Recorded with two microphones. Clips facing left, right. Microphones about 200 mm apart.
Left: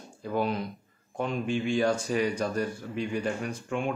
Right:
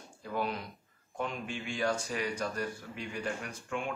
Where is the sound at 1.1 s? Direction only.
25° left (ahead or behind).